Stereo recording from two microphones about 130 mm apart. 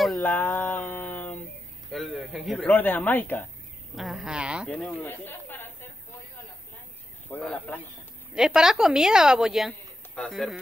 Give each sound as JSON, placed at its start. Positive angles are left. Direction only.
{"t": 0.2, "sound": "a sound", "side_deg": 15}
{"t": 1.9, "sound": "speech", "side_deg": 0}
{"t": 3.9, "sound": "a woman's voice", "side_deg": 0}
{"t": 4.6, "sound": "speech", "side_deg": 5}
{"t": 7.4, "sound": "a man's voice", "side_deg": 10}
{"t": 8.4, "sound": "a woman's voice", "side_deg": -5}